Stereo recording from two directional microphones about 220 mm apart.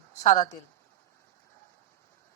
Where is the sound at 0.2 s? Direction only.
35° left (ahead or behind).